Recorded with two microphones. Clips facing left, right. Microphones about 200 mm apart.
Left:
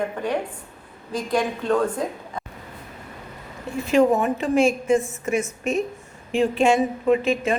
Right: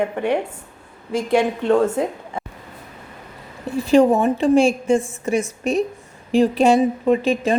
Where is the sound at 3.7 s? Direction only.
30° right (ahead or behind).